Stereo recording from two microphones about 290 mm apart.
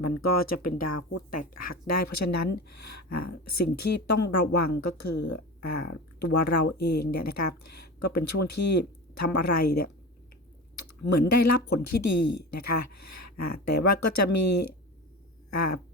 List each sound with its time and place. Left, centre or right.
0.0 s speech: left
11.1 s speech: left
15.4 s a sound: left